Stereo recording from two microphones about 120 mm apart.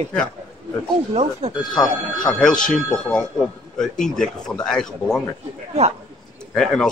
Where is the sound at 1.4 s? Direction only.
60° right (ahead or behind).